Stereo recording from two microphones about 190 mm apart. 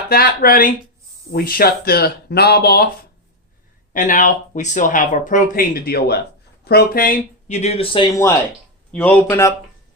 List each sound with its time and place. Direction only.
0.1 s speech: 50° left (ahead or behind)
3.9 s speech: 40° left (ahead or behind); by 8.3 s 20° left (ahead or behind)
8.9 s speech: 10° left (ahead or behind)